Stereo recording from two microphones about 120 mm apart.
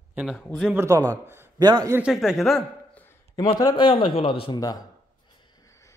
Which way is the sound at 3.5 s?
35° left (ahead or behind).